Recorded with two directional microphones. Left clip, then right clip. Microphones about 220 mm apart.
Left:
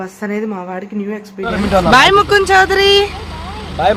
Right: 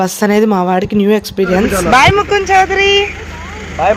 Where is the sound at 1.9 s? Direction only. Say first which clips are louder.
Even; 15° left (ahead or behind).